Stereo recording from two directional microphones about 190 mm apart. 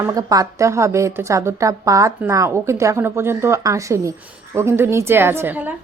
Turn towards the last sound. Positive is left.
turn(degrees=-10)  # may be behind; listen again after turning